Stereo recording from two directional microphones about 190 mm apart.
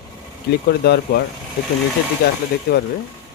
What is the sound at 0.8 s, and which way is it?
Speech, 60° left (ahead or behind).